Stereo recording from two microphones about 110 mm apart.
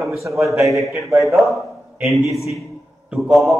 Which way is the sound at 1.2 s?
Centre (ahead or behind).